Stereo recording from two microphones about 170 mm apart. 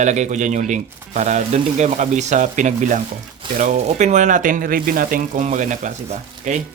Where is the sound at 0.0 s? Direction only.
45° right (ahead or behind).